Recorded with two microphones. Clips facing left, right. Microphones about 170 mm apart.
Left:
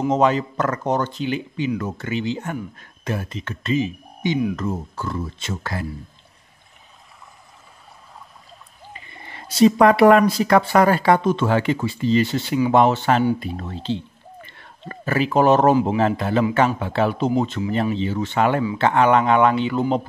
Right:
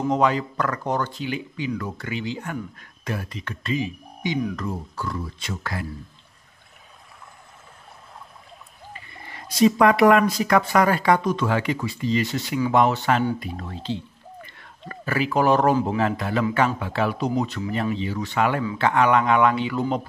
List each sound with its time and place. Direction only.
0.1 s speech: 25° left (ahead or behind)
8.9 s speech: 20° left (ahead or behind)